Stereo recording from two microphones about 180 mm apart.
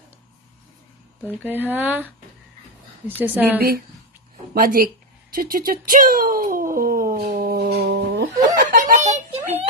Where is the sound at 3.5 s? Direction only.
55° right (ahead or behind); by 8.3 s 80° right.